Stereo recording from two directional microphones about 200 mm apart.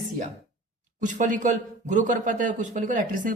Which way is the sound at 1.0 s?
40° right (ahead or behind).